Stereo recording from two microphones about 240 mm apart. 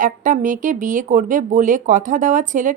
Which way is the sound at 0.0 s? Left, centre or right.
Right.